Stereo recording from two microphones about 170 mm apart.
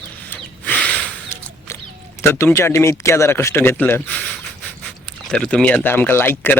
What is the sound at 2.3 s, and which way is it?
Speech, 15° left (ahead or behind).